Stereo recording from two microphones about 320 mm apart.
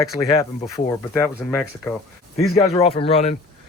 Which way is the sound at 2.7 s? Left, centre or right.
Centre.